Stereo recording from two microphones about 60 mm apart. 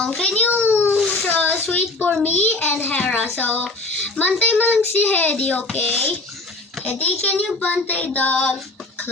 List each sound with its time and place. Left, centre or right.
0.0 s a child's voice: centre
0.4 s a child's voice: left
0.7 s a sound: left
1.3 s a sound: left
2.2 s a child's voice: left
3.6 s music: centre
4.2 s a child's voice: left